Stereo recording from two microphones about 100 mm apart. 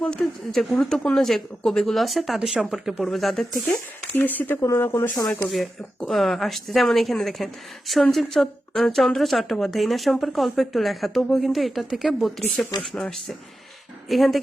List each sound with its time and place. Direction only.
0.0 s speech: 5° left (ahead or behind)
4.1 s speech: 20° left (ahead or behind)
5.5 s speech: centre (ahead or behind)